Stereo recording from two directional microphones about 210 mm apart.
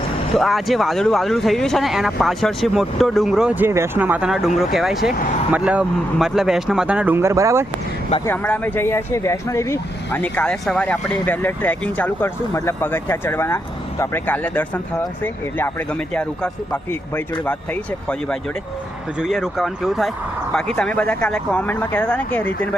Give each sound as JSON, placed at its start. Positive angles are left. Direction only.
{"t": 0.3, "sound": "speech", "side_deg": 0}
{"t": 8.2, "sound": "speech", "side_deg": 10}
{"t": 19.2, "sound": "speech", "side_deg": 0}